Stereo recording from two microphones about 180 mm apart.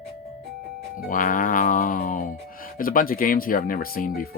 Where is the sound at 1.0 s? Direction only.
50° left (ahead or behind).